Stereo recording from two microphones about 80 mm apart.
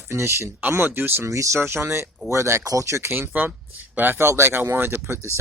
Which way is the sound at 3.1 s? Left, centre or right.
Right.